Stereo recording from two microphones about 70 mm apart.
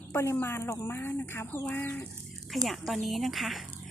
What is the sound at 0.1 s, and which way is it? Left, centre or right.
Speech, left.